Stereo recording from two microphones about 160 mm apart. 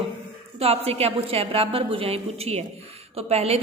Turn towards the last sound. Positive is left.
turn(degrees=-40)  # may be behind; listen again after turning